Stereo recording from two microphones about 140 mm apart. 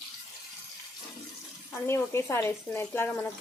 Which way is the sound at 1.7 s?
20° left (ahead or behind).